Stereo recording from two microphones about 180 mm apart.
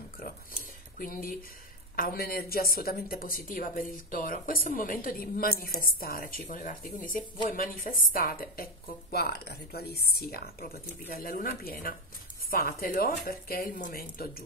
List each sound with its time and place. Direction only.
0.9 s a woman's voice: 50° left (ahead or behind)